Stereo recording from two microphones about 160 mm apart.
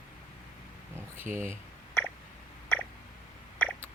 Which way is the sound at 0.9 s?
15° right (ahead or behind).